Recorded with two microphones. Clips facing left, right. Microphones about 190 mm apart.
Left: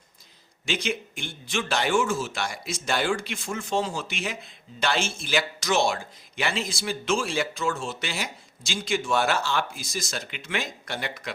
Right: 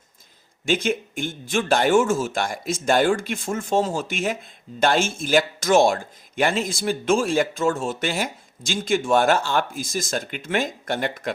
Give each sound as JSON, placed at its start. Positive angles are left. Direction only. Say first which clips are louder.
{"t": 0.6, "sound": "speech", "louder": "right 7 dB", "side_deg": -50}